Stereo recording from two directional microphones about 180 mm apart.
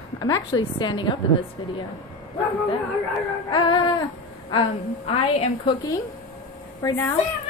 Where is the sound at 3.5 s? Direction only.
25° left (ahead or behind).